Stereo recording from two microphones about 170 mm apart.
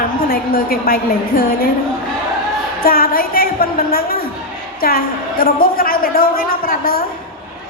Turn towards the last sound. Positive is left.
turn(degrees=60)  # may be behind; listen again after turning